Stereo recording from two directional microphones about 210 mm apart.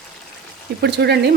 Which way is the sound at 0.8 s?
55° right (ahead or behind).